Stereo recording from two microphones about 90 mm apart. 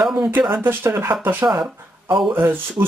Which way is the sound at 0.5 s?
25° right (ahead or behind).